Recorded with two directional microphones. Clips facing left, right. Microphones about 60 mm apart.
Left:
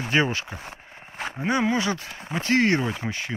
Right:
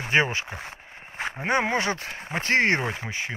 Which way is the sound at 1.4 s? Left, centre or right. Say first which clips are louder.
Left 1 dB; right.